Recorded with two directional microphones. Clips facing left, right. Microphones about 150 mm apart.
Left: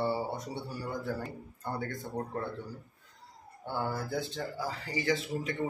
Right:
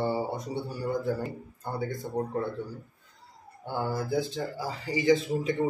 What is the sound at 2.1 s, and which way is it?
Speech, 5° right (ahead or behind).